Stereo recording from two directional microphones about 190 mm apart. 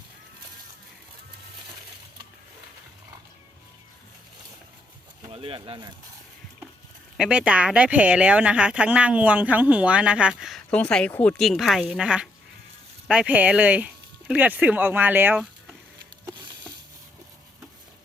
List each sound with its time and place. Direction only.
5.3 s speech: 30° right (ahead or behind)
7.2 s speech: 5° right (ahead or behind)